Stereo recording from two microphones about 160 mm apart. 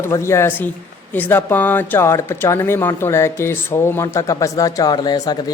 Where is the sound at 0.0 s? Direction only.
15° left (ahead or behind).